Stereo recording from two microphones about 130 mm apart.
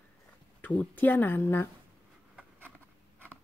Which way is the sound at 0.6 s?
10° left (ahead or behind).